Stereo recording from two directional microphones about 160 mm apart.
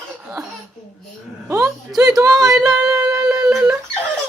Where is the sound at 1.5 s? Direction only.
15° right (ahead or behind).